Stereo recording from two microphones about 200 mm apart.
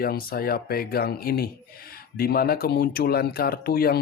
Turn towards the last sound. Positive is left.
turn(degrees=50)  # may be behind; listen again after turning